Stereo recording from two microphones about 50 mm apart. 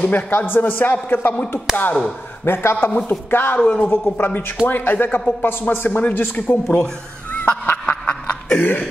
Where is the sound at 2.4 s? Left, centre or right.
Left.